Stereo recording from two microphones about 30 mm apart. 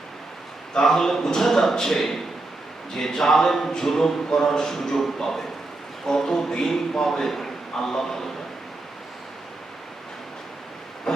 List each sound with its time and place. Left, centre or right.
0.7 s a man's voice: centre